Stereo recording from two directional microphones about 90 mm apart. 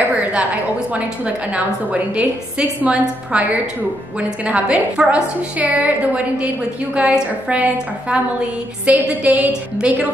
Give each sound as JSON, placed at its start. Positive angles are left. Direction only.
{"t": 0.2, "sound": "a sound", "side_deg": -15}
{"t": 0.9, "sound": "a woman's voice", "side_deg": -15}
{"t": 4.5, "sound": "a woman's voice", "side_deg": -15}